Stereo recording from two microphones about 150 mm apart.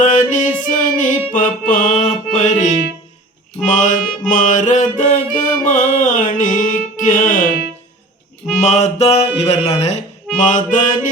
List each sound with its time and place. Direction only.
0.0 s music: 55° left (ahead or behind)
4.2 s mantra: 60° left (ahead or behind)
8.5 s music: 50° left (ahead or behind)